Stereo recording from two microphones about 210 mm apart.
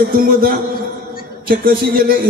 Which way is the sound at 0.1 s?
45° right (ahead or behind).